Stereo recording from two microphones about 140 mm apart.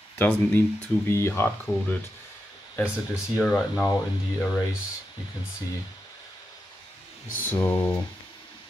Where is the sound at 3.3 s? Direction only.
5° left (ahead or behind).